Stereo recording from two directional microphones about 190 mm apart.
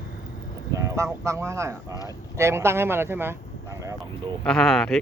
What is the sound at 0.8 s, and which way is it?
Speech, 15° right (ahead or behind).